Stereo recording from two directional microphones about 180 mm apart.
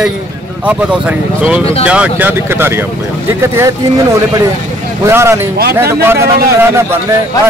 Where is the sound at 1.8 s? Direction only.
5° right (ahead or behind).